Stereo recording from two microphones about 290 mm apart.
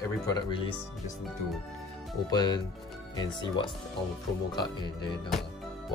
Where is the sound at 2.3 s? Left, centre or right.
Centre.